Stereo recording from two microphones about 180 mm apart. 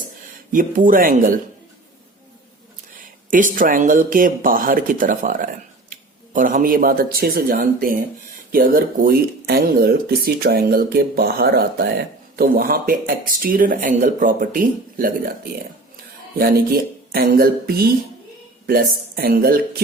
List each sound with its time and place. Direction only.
0.5 s speech: 50° right (ahead or behind)
3.0 s speech: 50° right (ahead or behind)